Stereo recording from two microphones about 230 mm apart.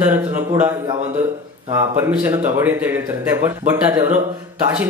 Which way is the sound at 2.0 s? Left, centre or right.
Centre.